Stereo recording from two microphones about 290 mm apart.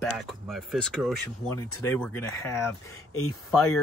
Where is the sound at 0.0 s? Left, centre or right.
Centre.